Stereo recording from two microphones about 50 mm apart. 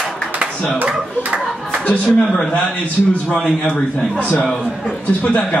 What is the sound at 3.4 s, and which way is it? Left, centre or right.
Speech, centre.